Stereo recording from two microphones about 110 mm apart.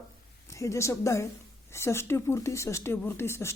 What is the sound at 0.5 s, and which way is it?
Speech, 30° left (ahead or behind).